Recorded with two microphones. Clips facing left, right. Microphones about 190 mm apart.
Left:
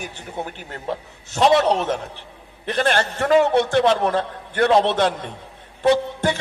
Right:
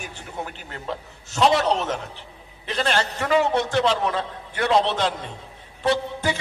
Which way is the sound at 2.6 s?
55° left (ahead or behind).